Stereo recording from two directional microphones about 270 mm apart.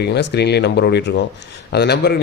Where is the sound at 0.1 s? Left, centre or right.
Left.